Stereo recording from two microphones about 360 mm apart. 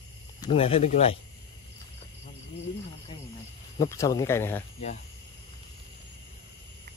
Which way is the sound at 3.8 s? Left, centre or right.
Centre.